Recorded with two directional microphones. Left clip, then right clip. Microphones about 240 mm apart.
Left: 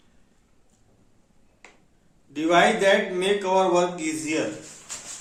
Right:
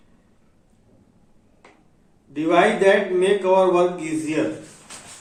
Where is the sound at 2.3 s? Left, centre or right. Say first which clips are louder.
Right 2 dB; left.